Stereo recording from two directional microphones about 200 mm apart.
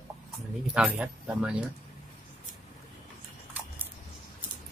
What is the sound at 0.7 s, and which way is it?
Speech, 5° right (ahead or behind).